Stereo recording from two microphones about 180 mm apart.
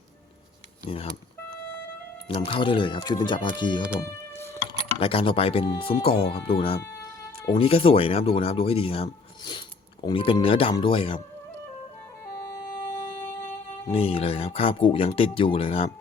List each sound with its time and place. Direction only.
0.9 s speech: 35° left (ahead or behind)
2.2 s speech: 30° left (ahead or behind)
4.0 s music: 15° left (ahead or behind)
4.9 s speech: 30° left (ahead or behind)
13.8 s speech: 30° left (ahead or behind)